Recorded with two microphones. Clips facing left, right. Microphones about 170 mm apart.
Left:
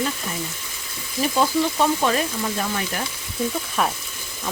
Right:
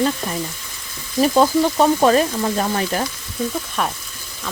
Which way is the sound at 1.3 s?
50° right (ahead or behind).